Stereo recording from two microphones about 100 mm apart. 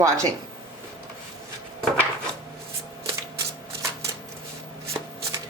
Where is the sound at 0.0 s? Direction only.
30° right (ahead or behind).